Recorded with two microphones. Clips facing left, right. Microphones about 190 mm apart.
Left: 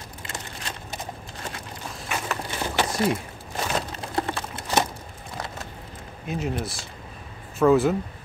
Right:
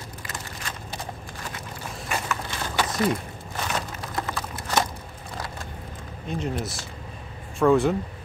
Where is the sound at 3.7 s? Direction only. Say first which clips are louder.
Left 2 dB; 30° left (ahead or behind).